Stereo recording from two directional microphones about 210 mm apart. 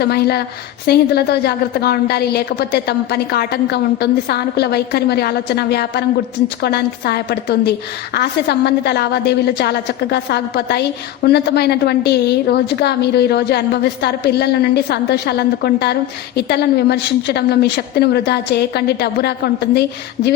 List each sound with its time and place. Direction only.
0.0 s a woman's voice: 50° left (ahead or behind)